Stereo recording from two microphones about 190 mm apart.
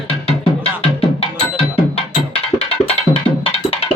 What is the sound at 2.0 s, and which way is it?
Music, 30° left (ahead or behind).